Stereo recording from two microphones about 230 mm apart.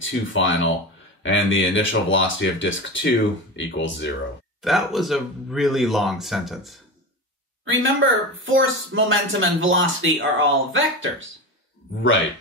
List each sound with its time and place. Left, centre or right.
0.0 s speech: left
4.6 s a man's voice: centre
7.6 s speech: right